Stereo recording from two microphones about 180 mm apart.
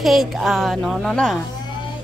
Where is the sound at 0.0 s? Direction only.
Centre (ahead or behind).